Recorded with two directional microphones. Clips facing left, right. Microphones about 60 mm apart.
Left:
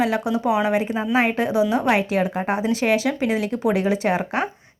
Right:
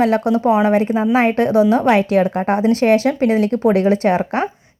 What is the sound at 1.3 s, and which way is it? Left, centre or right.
Speech, right.